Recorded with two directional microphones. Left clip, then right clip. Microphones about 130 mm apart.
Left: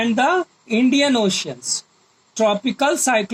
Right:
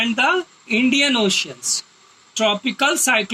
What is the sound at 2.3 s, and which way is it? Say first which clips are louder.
Speech: left 1 dB; 45° left (ahead or behind).